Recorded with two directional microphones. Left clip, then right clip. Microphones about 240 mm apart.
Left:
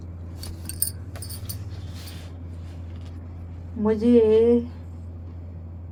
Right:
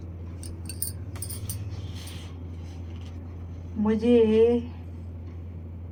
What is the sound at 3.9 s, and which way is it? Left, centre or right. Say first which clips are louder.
Speech: left 3 dB; left.